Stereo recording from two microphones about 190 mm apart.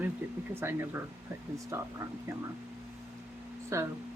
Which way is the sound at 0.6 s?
10° right (ahead or behind).